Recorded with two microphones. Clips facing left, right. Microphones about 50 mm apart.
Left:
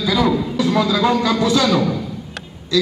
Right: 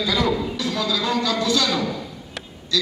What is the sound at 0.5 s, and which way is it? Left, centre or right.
A man's voice, left.